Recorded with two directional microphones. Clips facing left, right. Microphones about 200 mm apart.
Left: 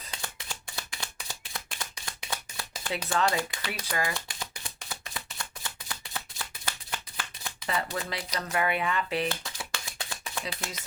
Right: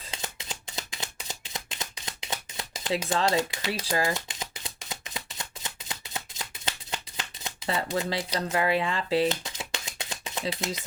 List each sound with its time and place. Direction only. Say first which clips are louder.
0.0 s shuffling cards: right 2 dB; 20° right (ahead or behind)
10.4 s speech: right 6 dB; 25° right (ahead or behind)